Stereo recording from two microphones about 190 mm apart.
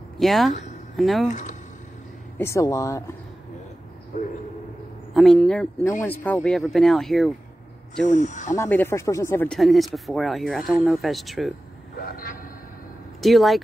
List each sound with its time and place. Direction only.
0.2 s speech: centre (ahead or behind)
1.3 s a sound: 40° left (ahead or behind)
2.3 s speech: 15° left (ahead or behind)
5.1 s speech: centre (ahead or behind)
8.1 s speech: 40° left (ahead or behind)
8.5 s speech: 10° left (ahead or behind)
9.6 s speech: centre (ahead or behind)
12.0 s vehicle: 50° left (ahead or behind)
13.2 s speech: centre (ahead or behind)